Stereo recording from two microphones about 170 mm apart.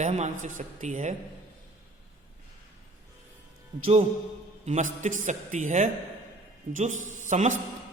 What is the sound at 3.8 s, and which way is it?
A man's voice, 35° right (ahead or behind).